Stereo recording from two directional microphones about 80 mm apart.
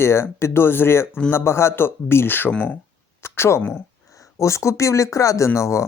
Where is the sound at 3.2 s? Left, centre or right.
Left.